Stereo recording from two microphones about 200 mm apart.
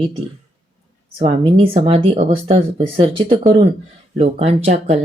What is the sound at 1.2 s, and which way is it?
Speech, 30° right (ahead or behind).